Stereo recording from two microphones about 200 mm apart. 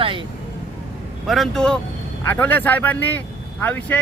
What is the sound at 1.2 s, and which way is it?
A man's voice, centre (ahead or behind).